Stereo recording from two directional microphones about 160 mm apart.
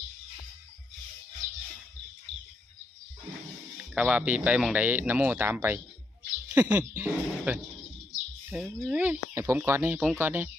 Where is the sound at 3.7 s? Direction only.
5° right (ahead or behind).